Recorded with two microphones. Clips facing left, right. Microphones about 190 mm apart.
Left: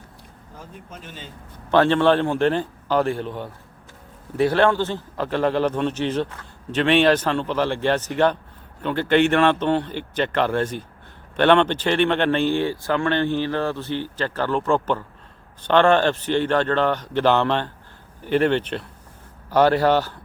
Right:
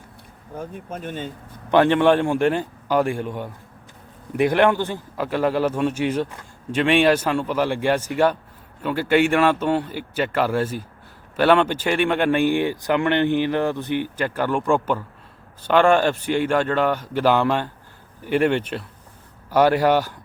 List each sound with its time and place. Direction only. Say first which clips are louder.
0.5 s speech: right 9 dB; 55° right (ahead or behind)
1.7 s a man's voice: right 1 dB; 15° right (ahead or behind)